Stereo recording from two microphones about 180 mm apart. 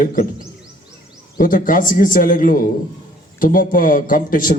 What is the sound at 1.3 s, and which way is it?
A man's voice, 50° left (ahead or behind).